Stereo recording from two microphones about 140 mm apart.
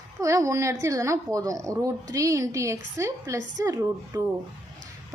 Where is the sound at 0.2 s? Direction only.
20° right (ahead or behind).